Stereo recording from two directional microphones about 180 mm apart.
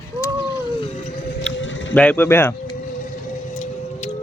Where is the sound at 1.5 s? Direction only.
90° left.